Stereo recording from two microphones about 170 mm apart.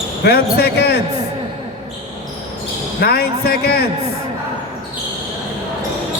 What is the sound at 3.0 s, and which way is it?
Speech, 65° left (ahead or behind).